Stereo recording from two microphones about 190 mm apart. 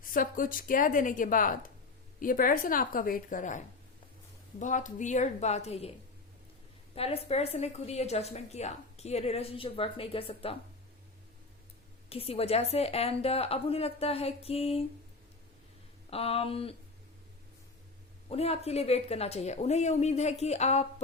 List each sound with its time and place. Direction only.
0.0 s speech: 45° left (ahead or behind)
4.6 s a woman's voice: 40° left (ahead or behind)
6.9 s a woman's voice: 30° left (ahead or behind)
12.0 s a woman's voice: 30° left (ahead or behind)
16.0 s a woman's voice: 30° left (ahead or behind)
18.3 s a woman's voice: 35° left (ahead or behind)